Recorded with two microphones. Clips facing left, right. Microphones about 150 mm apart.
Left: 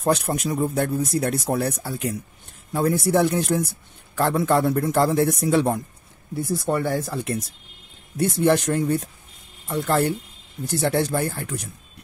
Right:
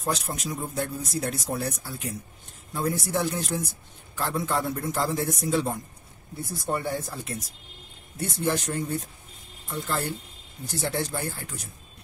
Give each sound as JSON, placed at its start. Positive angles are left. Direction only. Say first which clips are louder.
{"t": 0.0, "sound": "speech", "louder": "left 8 dB", "side_deg": 60}
{"t": 6.6, "sound": "speech", "louder": "left 3 dB", "side_deg": 90}
{"t": 8.2, "sound": "speech", "louder": "left 8 dB", "side_deg": 70}